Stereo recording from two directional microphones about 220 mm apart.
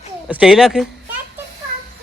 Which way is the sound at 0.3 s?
5° right (ahead or behind).